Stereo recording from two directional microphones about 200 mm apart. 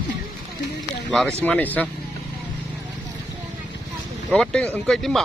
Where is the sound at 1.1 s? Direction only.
Centre (ahead or behind).